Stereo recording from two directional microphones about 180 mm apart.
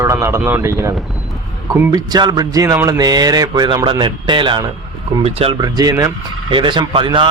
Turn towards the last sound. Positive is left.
turn(degrees=-25)  # may be behind; listen again after turning